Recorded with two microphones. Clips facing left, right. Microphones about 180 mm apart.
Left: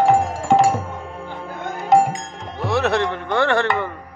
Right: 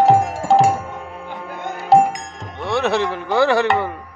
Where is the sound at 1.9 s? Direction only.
30° right (ahead or behind).